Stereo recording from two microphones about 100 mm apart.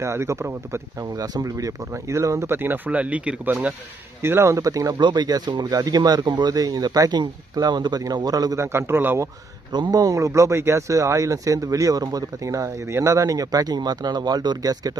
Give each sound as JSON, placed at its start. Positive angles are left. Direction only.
{"t": 0.0, "sound": "speech", "side_deg": -30}
{"t": 1.2, "sound": "speech", "side_deg": -40}
{"t": 4.2, "sound": "speech", "side_deg": -25}
{"t": 8.5, "sound": "speech", "side_deg": -25}
{"t": 9.7, "sound": "speech", "side_deg": -45}